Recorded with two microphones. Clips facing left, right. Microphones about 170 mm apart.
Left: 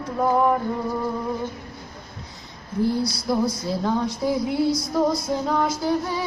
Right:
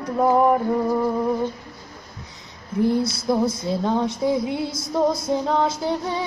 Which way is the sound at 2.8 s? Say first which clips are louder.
Right 3 dB; 20° right (ahead or behind).